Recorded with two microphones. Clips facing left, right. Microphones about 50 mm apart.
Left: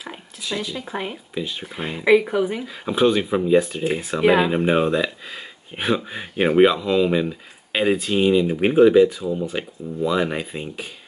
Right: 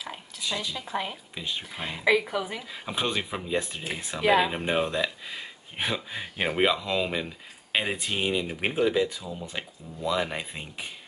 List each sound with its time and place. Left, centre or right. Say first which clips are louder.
0.5 s speech: left 4 dB; centre
2.4 s speech: left 10 dB; centre